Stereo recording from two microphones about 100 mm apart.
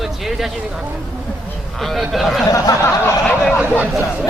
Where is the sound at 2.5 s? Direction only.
35° left (ahead or behind).